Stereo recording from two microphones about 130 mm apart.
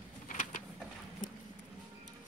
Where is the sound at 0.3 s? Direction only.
75° left (ahead or behind).